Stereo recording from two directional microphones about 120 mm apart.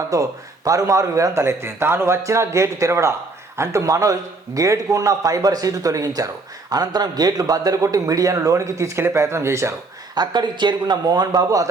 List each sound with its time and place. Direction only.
0.1 s a man's voice: 30° right (ahead or behind)
10.2 s a man's voice: 35° right (ahead or behind)